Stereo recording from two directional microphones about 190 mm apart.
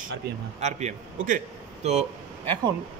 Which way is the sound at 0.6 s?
35° right (ahead or behind).